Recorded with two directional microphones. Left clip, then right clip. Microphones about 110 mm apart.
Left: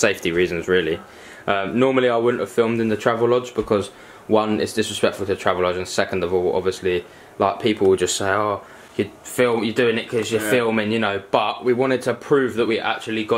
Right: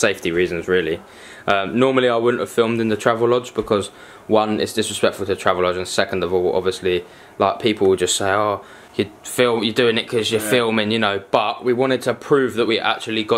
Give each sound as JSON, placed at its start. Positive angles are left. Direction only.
{"t": 0.0, "sound": "speech", "side_deg": -5}
{"t": 1.4, "sound": "speech", "side_deg": -20}
{"t": 9.8, "sound": "speech", "side_deg": -30}
{"t": 11.3, "sound": "speech", "side_deg": -10}